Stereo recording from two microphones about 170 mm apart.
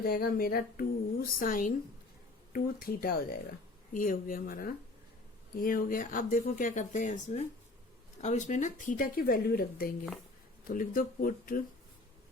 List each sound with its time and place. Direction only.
0.0 s speech: 60° left (ahead or behind)